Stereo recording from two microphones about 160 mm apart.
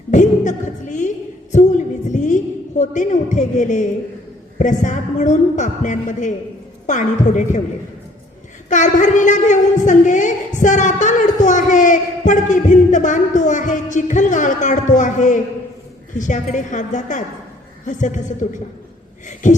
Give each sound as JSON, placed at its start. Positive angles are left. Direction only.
{"t": 0.1, "sound": "a sound", "side_deg": 50}
{"t": 4.5, "sound": "speech", "side_deg": 50}
{"t": 8.7, "sound": "speech", "side_deg": 50}